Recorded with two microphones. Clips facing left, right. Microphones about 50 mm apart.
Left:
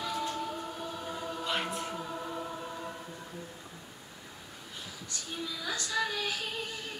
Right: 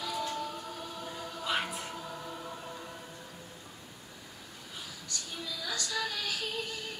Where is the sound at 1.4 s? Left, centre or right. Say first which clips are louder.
Right 1 dB; centre.